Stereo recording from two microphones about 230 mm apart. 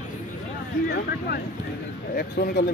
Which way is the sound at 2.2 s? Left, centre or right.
Left.